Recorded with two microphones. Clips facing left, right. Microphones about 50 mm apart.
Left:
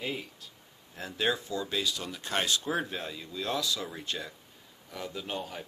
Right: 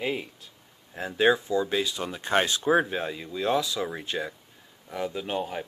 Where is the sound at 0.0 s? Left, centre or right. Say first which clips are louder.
Right 6 dB; right.